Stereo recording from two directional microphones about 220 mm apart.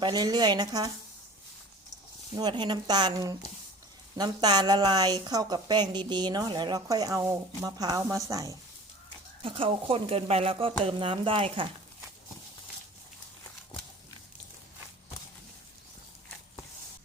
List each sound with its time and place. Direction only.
0.0 s speech: 20° right (ahead or behind)
2.3 s a woman's voice: 20° right (ahead or behind)